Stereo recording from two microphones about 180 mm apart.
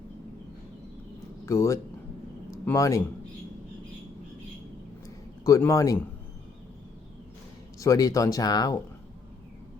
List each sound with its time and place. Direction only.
1.5 s speech: 15° left (ahead or behind)
5.0 s a sound: 20° left (ahead or behind)
7.8 s speech: 20° left (ahead or behind)